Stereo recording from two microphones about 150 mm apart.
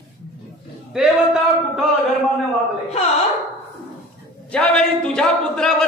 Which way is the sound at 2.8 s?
45° left (ahead or behind).